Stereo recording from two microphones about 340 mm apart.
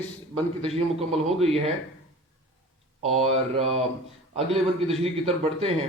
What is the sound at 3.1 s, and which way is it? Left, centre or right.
Speech, centre.